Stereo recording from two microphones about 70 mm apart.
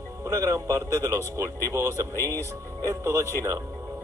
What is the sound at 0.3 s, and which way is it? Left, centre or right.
Speech, right.